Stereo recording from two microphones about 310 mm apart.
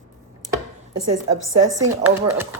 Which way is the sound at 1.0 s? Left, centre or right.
Right.